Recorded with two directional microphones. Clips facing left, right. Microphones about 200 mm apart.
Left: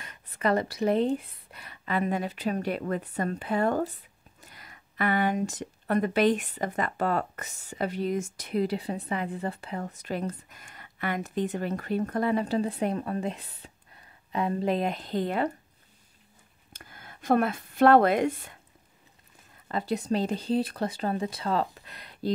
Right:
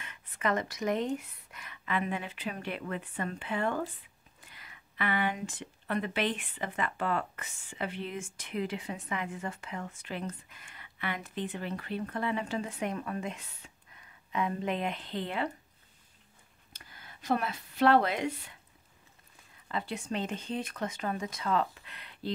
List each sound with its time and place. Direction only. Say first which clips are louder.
0.0 s speech: left 5 dB; 40° left (ahead or behind)
16.7 s speech: left 5 dB; 50° left (ahead or behind)
19.7 s speech: left 7 dB; 40° left (ahead or behind)